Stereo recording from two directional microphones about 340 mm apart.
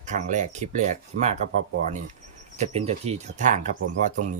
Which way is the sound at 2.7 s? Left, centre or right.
Centre.